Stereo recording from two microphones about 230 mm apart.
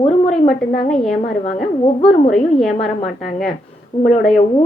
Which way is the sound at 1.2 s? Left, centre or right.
Left.